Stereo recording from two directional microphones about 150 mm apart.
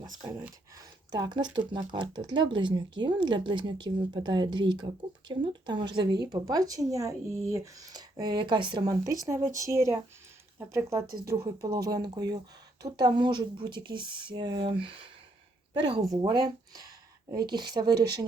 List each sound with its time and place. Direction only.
0.2 s speech: 20° right (ahead or behind)
16.1 s speech: 25° right (ahead or behind)